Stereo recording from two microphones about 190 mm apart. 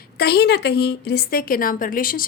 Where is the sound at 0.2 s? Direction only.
60° left (ahead or behind).